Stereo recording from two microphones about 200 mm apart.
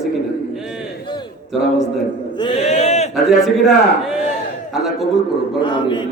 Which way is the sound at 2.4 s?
25° left (ahead or behind).